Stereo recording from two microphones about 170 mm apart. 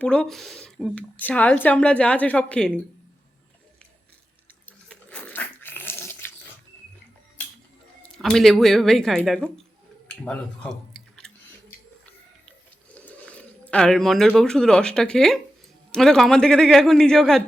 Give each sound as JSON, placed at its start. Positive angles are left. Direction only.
{"t": 0.0, "sound": "a man's voice", "side_deg": 5}
{"t": 4.6, "sound": "dog", "side_deg": 10}
{"t": 8.2, "sound": "a man's voice", "side_deg": 0}
{"t": 12.0, "sound": "a sound", "side_deg": 10}
{"t": 15.9, "sound": "a man's voice", "side_deg": 5}